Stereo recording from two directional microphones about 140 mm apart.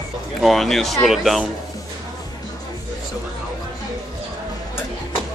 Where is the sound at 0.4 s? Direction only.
Centre (ahead or behind).